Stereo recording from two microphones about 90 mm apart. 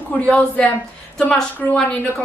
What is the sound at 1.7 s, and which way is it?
Speech, 15° left (ahead or behind).